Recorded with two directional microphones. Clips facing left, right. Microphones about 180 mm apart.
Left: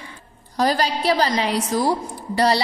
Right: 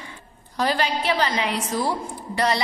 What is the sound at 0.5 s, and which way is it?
A woman's voice, 40° left (ahead or behind).